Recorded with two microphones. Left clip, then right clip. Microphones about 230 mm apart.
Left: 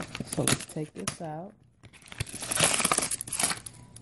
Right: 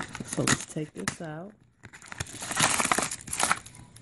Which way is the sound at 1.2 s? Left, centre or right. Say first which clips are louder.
Left 1 dB; centre.